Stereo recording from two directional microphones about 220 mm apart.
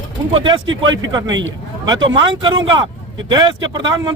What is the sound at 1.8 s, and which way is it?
Speech, 20° right (ahead or behind).